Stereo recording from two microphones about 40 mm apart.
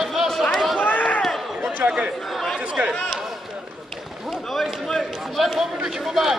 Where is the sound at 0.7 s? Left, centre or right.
Left.